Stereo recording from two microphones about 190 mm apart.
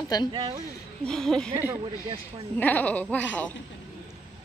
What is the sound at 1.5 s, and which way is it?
Speech, 10° right (ahead or behind).